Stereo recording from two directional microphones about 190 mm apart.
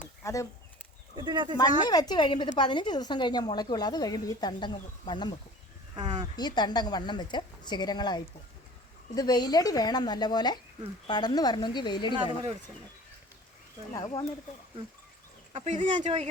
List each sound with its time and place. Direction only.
0.2 s a sound: 15° left (ahead or behind)
1.1 s speech: 25° right (ahead or behind)
1.5 s speech: 20° left (ahead or behind)
6.0 s speech: 25° right (ahead or behind)
6.3 s speech: 20° left (ahead or behind)
13.9 s speech: 20° left (ahead or behind)
15.5 s speech: 35° right (ahead or behind)